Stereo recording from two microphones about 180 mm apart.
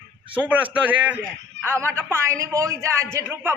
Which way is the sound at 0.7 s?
10° right (ahead or behind).